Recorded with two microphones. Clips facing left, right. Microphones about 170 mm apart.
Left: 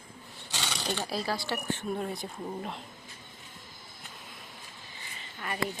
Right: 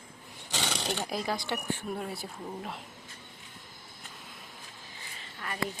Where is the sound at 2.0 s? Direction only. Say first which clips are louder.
Left 3 dB; 5° right (ahead or behind).